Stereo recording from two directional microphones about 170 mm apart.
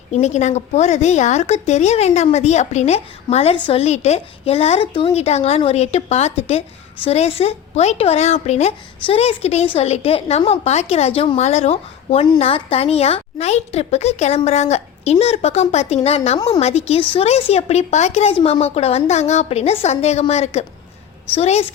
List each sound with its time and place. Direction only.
0.1 s a woman's voice: 45° left (ahead or behind)